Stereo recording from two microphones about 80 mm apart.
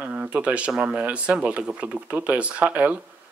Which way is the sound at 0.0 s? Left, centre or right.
Centre.